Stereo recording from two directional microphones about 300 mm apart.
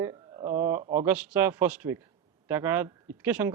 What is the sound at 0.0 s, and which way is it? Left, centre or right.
A man's voice, centre.